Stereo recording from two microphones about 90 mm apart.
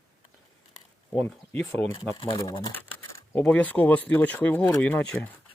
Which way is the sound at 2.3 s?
35° left (ahead or behind).